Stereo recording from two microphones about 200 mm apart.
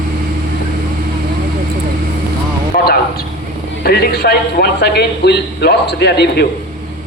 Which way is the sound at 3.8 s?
50° left (ahead or behind).